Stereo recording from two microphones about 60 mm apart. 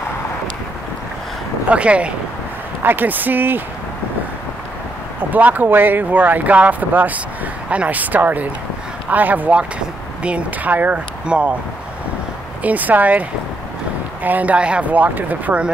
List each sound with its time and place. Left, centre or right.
1.7 s speech: right
2.8 s speech: right
5.3 s speech: right
12.6 s speech: right
14.2 s speech: right